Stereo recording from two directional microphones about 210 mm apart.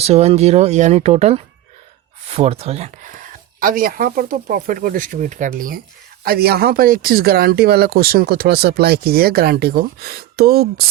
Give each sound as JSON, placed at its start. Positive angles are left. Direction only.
{"t": 0.0, "sound": "speech", "side_deg": -30}